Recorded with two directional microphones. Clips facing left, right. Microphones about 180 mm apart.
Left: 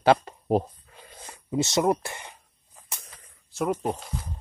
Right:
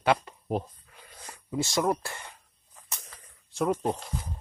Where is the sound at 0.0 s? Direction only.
35° left (ahead or behind).